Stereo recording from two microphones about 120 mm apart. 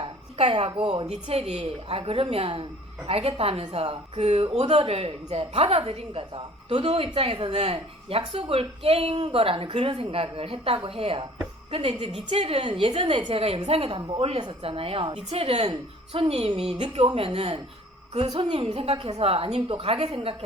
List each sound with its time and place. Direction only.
0.0 s a sound: 50° right (ahead or behind)
0.8 s a woman's voice: 45° right (ahead or behind)
1.1 s a woman's voice: 60° right (ahead or behind)
18.3 s a woman's voice: 40° right (ahead or behind)
18.5 s a woman's voice: 50° right (ahead or behind)